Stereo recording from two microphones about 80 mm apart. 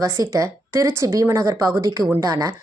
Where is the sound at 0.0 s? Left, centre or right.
Right.